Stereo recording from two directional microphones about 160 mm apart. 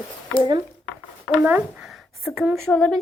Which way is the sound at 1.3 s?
10° right (ahead or behind).